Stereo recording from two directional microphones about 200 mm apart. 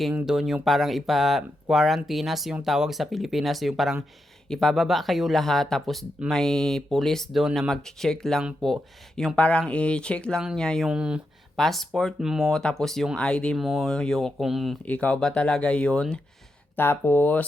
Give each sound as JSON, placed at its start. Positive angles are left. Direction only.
{"t": 0.0, "sound": "speech", "side_deg": -5}